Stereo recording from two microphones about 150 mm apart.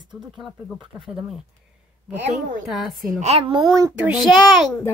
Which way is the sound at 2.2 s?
50° right (ahead or behind).